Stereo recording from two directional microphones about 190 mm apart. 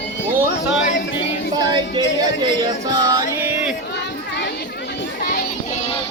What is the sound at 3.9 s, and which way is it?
Chatter, 65° left (ahead or behind).